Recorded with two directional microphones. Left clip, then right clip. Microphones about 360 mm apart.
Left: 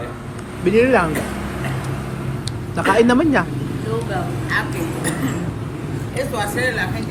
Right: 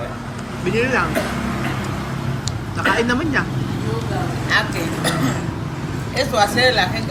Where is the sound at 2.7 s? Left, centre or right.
Centre.